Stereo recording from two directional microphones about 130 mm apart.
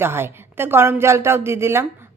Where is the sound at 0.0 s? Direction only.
15° right (ahead or behind).